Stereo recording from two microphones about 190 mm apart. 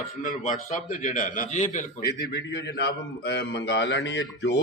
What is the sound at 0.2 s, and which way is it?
A man's voice, 45° left (ahead or behind).